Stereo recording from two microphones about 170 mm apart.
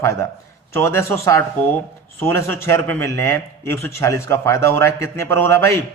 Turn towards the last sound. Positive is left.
turn(degrees=15)  # may be behind; listen again after turning